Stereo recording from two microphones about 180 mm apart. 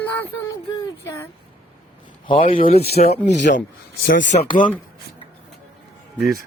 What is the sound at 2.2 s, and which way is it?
Speech, 30° left (ahead or behind).